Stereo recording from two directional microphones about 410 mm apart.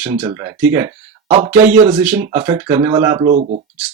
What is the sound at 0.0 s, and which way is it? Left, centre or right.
Speech, centre.